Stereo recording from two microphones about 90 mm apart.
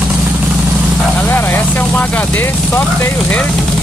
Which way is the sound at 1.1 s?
20° left (ahead or behind).